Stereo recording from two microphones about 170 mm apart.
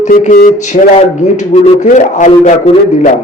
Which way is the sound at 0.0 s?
50° left (ahead or behind).